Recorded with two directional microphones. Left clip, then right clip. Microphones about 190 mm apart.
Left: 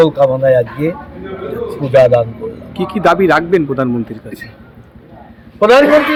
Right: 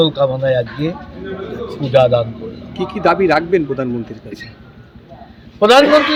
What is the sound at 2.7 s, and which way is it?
Speech, 50° left (ahead or behind).